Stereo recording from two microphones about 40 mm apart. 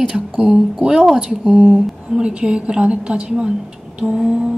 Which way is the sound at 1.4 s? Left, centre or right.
Right.